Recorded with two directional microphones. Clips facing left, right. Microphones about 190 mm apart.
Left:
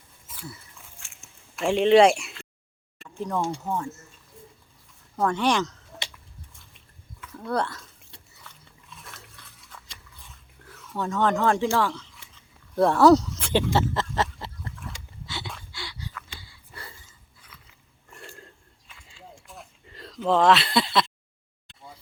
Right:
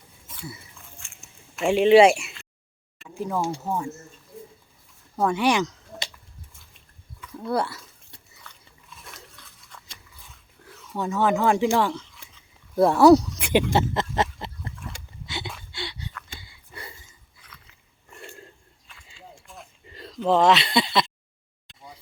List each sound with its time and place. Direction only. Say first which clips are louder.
0.8 s chewing: right 2 dB; 5° left (ahead or behind)
3.0 s speech: right 1 dB; 5° right (ahead or behind)
5.1 s speech: right 2 dB; 10° right (ahead or behind)
7.3 s speech: right 2 dB; 10° right (ahead or behind)
8.9 s dog: even; centre (ahead or behind)
9.7 s a sound: even; 5° left (ahead or behind)
10.9 s speech: right 1 dB; 10° right (ahead or behind)
12.1 s a sound: right 1 dB; 5° right (ahead or behind)
18.1 s a sound: right 2 dB; 5° right (ahead or behind)